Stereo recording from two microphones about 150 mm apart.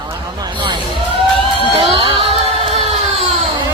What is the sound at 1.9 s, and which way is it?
Music, 40° right (ahead or behind).